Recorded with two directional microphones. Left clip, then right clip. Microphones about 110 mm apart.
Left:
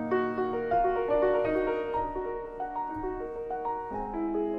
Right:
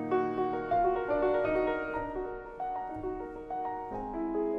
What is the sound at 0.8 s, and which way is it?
Music, 20° left (ahead or behind).